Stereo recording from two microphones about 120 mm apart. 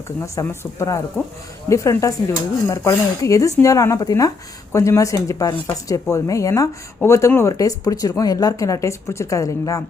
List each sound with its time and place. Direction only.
0.2 s speech: 25° left (ahead or behind)